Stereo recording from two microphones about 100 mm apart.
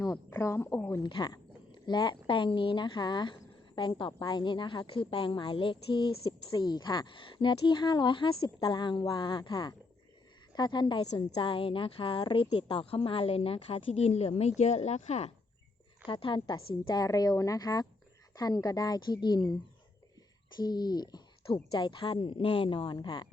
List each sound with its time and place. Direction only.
0.0 s a woman's voice: 30° left (ahead or behind)
1.0 s speech: 45° left (ahead or behind)
6.5 s speech: 45° left (ahead or behind)
11.3 s a woman's voice: 65° left (ahead or behind); by 15.3 s 90° left
16.0 s a woman's voice: 55° left (ahead or behind)
20.6 s speech: 45° left (ahead or behind)
21.4 s speech: 55° left (ahead or behind)
23.0 s speech: 45° left (ahead or behind)